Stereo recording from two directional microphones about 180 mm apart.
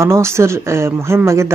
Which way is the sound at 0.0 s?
15° right (ahead or behind).